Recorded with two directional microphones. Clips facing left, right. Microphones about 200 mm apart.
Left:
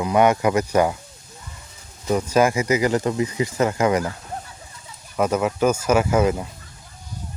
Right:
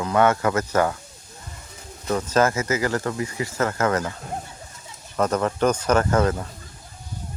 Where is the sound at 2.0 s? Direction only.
10° left (ahead or behind).